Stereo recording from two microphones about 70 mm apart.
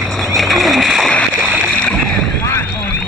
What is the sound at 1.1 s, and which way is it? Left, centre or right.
Boat, centre.